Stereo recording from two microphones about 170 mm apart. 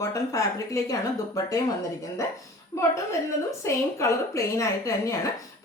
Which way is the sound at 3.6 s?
15° left (ahead or behind).